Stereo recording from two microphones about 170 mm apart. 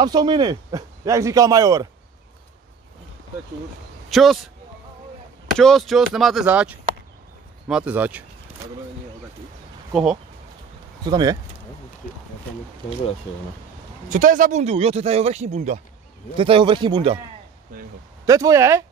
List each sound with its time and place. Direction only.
0.0 s speech: 25° right (ahead or behind)
4.1 s a man's voice: centre (ahead or behind)
5.6 s speech: centre (ahead or behind)
11.1 s speech: 25° right (ahead or behind)
14.0 s speech: 50° right (ahead or behind)
16.3 s speech: 30° right (ahead or behind)
18.2 s speech: 20° right (ahead or behind)